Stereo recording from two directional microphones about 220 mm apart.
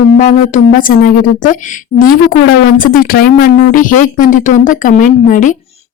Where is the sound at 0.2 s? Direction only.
35° left (ahead or behind).